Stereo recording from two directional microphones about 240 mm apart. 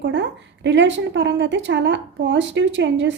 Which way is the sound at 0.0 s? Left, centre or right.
Right.